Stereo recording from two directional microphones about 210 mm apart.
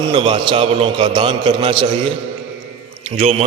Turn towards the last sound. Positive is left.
turn(degrees=-30)  # may be behind; listen again after turning